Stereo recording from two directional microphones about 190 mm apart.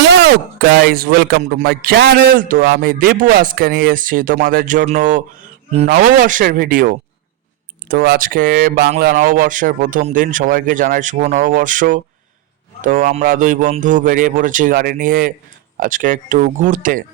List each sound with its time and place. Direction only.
0.1 s speech: 65° right (ahead or behind); by 17.0 s 45° right (ahead or behind)